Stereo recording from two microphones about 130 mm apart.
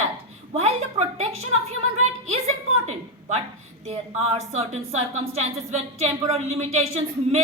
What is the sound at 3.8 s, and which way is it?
A woman's voice, 55° right (ahead or behind).